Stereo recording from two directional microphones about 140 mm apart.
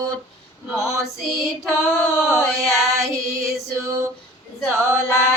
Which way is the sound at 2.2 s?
5° right (ahead or behind).